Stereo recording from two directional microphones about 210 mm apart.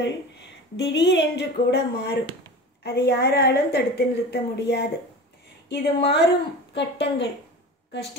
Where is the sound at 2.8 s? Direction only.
50° left (ahead or behind).